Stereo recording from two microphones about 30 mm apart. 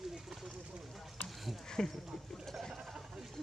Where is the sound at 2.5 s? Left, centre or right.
Centre.